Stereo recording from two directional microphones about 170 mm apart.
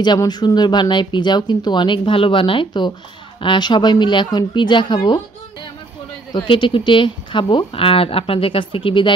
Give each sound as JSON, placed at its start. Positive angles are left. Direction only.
{"t": 0.0, "sound": "speech", "side_deg": 25}
{"t": 6.3, "sound": "speech", "side_deg": 30}